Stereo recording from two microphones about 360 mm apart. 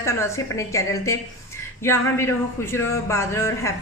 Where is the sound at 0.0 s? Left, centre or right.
Centre.